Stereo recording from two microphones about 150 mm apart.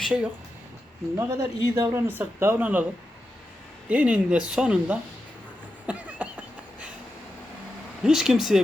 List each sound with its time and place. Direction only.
0.0 s speech: 5° right (ahead or behind)
1.1 s speech: 20° right (ahead or behind)
3.8 s speech: 10° right (ahead or behind)
5.8 s a sound: 10° right (ahead or behind)
8.0 s speech: 5° right (ahead or behind)